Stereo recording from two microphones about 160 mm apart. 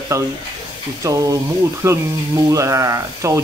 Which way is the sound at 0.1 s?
20° right (ahead or behind).